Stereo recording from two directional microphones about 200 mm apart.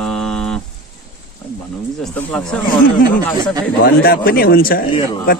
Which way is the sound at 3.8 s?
50° left (ahead or behind).